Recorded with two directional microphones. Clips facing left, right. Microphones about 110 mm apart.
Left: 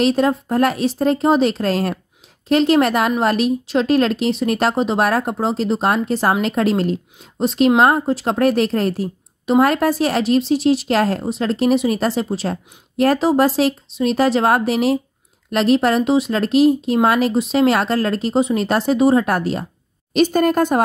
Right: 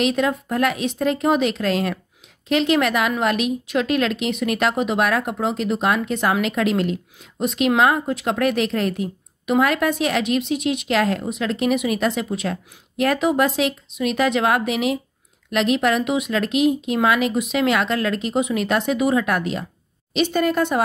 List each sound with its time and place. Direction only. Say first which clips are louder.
0.0 s speech: left 4 dB; 35° left (ahead or behind)